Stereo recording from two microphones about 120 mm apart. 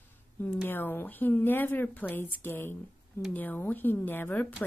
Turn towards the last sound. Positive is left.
turn(degrees=15)  # may be behind; listen again after turning